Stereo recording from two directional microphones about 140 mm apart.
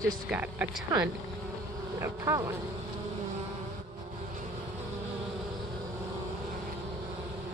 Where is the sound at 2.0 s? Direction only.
20° right (ahead or behind).